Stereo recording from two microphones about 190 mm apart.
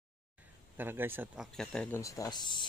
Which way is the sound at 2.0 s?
15° left (ahead or behind).